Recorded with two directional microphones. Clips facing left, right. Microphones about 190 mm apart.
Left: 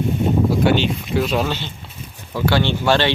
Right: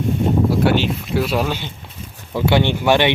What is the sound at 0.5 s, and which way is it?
Speech, 5° right (ahead or behind).